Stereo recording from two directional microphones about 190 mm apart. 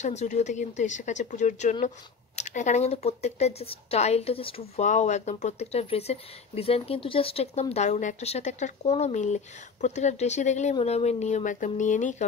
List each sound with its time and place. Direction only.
0.0 s speech: 35° left (ahead or behind)